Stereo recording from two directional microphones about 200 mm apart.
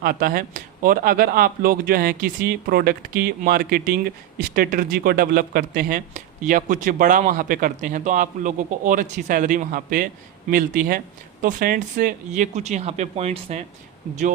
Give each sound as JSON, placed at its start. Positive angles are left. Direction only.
{"t": 0.0, "sound": "speech", "side_deg": -45}